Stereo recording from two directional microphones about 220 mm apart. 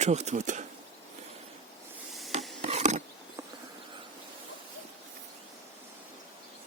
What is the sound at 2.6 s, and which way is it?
Mechanisms, 30° right (ahead or behind).